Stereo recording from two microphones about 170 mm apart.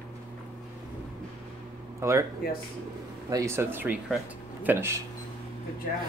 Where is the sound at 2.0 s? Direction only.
15° right (ahead or behind).